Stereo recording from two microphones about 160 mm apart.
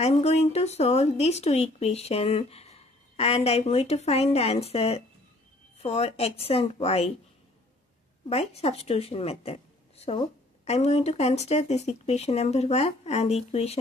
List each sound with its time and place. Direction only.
0.0 s a woman's voice: 40° left (ahead or behind)
8.3 s a woman's voice: 40° left (ahead or behind)